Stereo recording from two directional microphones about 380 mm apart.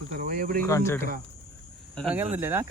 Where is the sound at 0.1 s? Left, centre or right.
Right.